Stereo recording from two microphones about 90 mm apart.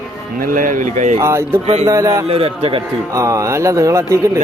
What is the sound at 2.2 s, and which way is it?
Speech, 90° right.